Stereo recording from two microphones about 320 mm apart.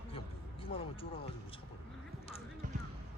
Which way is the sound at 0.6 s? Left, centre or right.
Centre.